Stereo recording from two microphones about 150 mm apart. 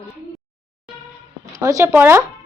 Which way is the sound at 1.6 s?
20° right (ahead or behind).